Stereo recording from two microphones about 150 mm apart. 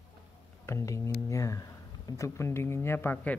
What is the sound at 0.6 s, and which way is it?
Speech, 20° left (ahead or behind).